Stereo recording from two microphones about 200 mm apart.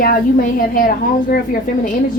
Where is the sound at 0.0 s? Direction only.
45° left (ahead or behind).